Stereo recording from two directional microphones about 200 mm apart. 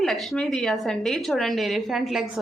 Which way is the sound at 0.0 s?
Centre (ahead or behind).